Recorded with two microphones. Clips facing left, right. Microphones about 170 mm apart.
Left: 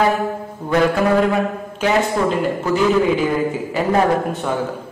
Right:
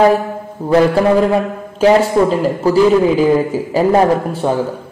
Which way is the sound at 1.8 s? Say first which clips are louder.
Right 7 dB; 35° right (ahead or behind).